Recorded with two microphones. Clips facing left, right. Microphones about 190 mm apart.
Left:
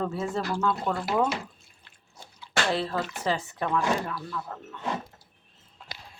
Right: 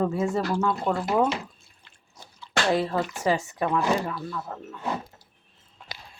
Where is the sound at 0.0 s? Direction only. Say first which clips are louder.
Right 4 dB; 10° right (ahead or behind).